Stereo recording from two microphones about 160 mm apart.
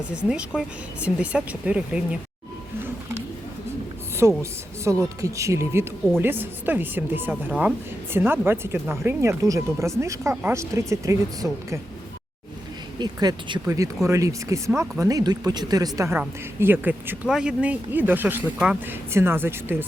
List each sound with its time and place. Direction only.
0.1 s speech: 5° right (ahead or behind)
4.4 s speech: 20° right (ahead or behind)
13.0 s speech: 25° right (ahead or behind)